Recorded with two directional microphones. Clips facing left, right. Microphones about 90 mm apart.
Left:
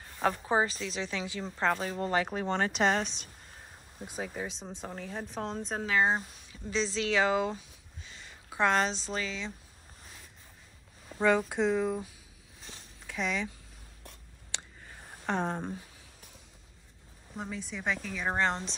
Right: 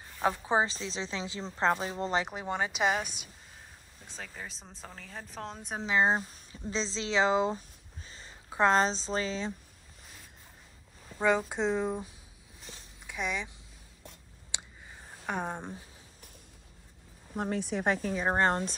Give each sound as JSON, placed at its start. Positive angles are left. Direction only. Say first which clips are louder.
{"t": 0.2, "sound": "speech", "louder": "even", "side_deg": -15}
{"t": 2.2, "sound": "speech", "louder": "left 3 dB", "side_deg": -10}
{"t": 4.0, "sound": "speech", "louder": "left 7 dB", "side_deg": 15}
{"t": 5.9, "sound": "speech", "louder": "right 1 dB", "side_deg": -30}
{"t": 7.5, "sound": "a sound", "louder": "right 2 dB", "side_deg": -35}
{"t": 11.1, "sound": "speech", "louder": "left 1 dB", "side_deg": -15}
{"t": 13.0, "sound": "speech", "louder": "left 2 dB", "side_deg": -15}
{"t": 14.5, "sound": "a sound", "louder": "even", "side_deg": -10}
{"t": 17.4, "sound": "speech", "louder": "right 7 dB", "side_deg": -60}